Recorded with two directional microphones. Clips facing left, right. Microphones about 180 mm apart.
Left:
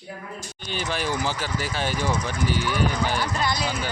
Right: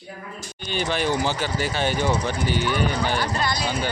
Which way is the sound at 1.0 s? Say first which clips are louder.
Right 4 dB; 25° right (ahead or behind).